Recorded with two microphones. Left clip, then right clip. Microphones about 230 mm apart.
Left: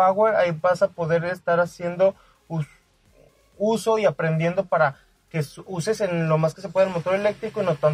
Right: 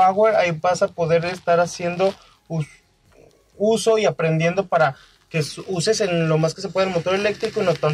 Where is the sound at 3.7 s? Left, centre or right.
Left.